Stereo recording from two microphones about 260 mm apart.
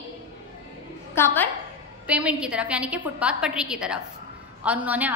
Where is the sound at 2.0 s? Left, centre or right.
Centre.